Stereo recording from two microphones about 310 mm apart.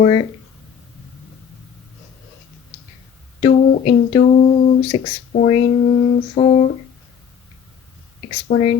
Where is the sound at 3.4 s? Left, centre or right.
Centre.